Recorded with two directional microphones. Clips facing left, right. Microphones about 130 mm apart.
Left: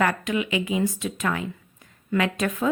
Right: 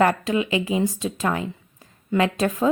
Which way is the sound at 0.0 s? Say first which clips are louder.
Right 4 dB; 30° right (ahead or behind).